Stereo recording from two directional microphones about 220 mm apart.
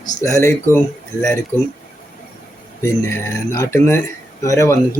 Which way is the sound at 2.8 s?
10° left (ahead or behind).